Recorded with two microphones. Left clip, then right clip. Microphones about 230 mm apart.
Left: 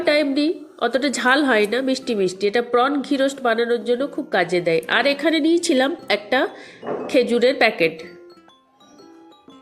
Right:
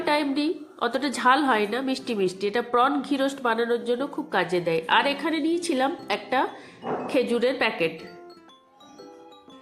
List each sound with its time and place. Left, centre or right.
0.0 s a woman's voice: centre